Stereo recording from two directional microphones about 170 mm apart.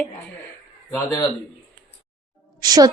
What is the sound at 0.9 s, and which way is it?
Speech, 20° left (ahead or behind).